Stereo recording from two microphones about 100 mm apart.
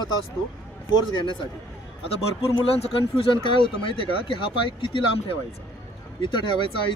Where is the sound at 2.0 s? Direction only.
70° left (ahead or behind).